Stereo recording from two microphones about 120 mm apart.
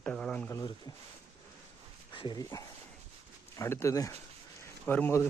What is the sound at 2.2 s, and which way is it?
Speech, 40° left (ahead or behind).